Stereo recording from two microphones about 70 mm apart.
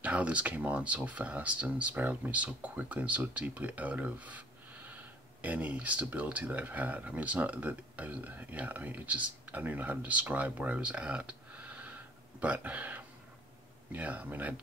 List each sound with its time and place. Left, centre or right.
0.0 s speech: centre